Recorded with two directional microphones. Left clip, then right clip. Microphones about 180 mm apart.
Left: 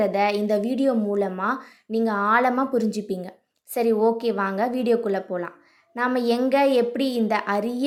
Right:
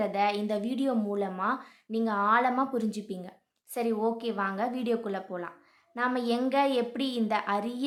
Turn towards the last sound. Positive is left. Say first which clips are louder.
# left 6 dB
turn(degrees=15)  # may be behind; listen again after turning